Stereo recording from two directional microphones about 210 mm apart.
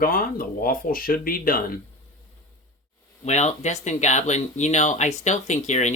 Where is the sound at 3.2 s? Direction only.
30° left (ahead or behind).